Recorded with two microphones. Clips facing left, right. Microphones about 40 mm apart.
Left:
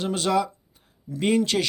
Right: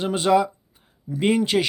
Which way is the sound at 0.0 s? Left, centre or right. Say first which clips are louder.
Right 4 dB; centre.